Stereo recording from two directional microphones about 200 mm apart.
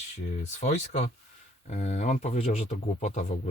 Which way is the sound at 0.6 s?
35° left (ahead or behind).